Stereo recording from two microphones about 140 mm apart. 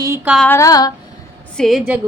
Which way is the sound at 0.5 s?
25° left (ahead or behind).